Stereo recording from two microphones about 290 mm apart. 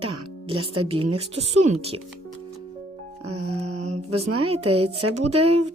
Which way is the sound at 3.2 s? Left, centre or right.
Right.